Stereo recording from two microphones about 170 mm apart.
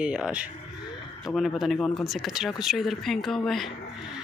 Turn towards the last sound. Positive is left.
turn(degrees=0)  # may be behind; listen again after turning